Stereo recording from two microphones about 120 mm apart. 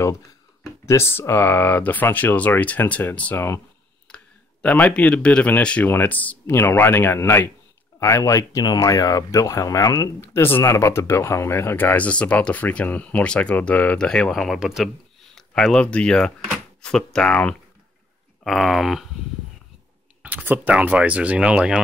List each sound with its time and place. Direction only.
0.8 s speech: 20° left (ahead or behind)
18.4 s speech: centre (ahead or behind)
20.2 s speech: 15° right (ahead or behind)